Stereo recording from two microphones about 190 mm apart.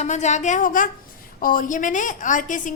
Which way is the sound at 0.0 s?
35° left (ahead or behind).